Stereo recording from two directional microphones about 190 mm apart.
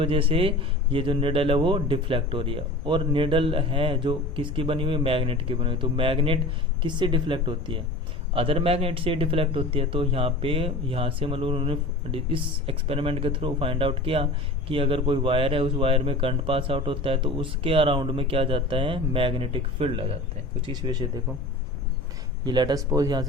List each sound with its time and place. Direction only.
0.0 s speech: 30° right (ahead or behind)
22.4 s speech: 20° right (ahead or behind)